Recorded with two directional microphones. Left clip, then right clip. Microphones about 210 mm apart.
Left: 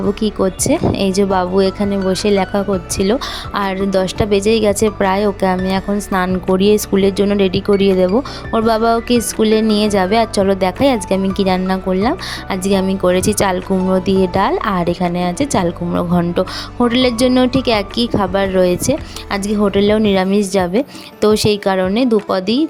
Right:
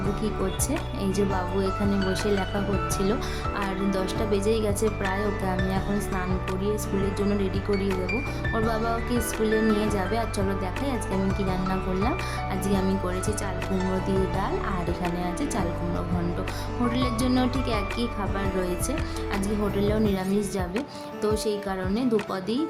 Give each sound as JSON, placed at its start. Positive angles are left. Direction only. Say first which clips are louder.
{"t": 0.2, "sound": "speech", "louder": "left 12 dB", "side_deg": 40}
{"t": 3.0, "sound": "music", "louder": "left 10 dB", "side_deg": 40}
{"t": 16.9, "sound": "speech", "louder": "left 13 dB", "side_deg": 40}
{"t": 21.2, "sound": "music", "louder": "left 13 dB", "side_deg": 45}